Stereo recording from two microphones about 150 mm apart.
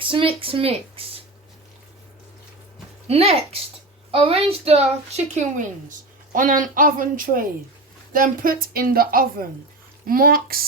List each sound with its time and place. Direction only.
0.0 s speech: 35° right (ahead or behind)
3.1 s a woman's voice: 40° right (ahead or behind)
6.3 s a woman's voice: 65° right (ahead or behind)